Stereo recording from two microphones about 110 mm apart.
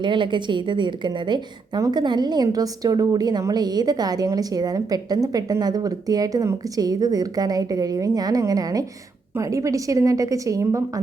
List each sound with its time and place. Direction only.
0.0 s a woman's voice: 45° right (ahead or behind); by 11.0 s 30° right (ahead or behind)